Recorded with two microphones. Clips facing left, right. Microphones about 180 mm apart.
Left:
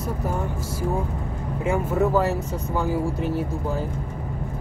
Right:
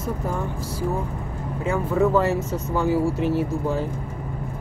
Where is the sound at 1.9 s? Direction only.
Centre (ahead or behind).